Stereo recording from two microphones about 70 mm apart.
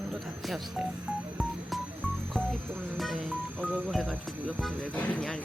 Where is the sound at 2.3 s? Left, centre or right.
Centre.